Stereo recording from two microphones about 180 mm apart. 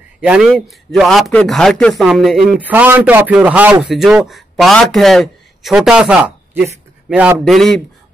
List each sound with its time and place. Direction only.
0.2 s a man's voice: 5° right (ahead or behind)